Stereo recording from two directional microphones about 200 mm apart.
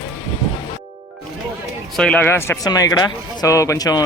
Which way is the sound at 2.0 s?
5° left (ahead or behind).